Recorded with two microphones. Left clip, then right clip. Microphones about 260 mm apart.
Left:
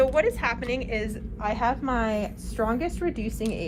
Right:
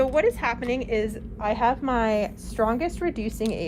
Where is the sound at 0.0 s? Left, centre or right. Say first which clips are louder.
Even; right.